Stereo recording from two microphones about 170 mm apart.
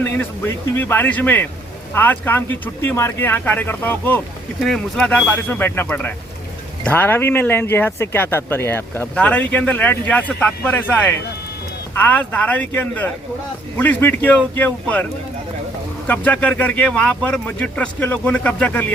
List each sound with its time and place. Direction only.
0.0 s speech: 10° left (ahead or behind)
16.0 s speech: 10° left (ahead or behind)